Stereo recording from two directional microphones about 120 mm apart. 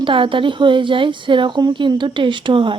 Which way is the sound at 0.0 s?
45° right (ahead or behind).